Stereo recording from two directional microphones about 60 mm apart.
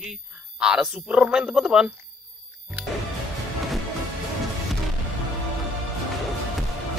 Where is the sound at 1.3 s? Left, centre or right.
Centre.